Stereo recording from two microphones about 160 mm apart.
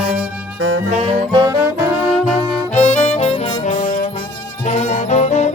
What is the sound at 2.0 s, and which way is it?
Brass instrument, 5° right (ahead or behind).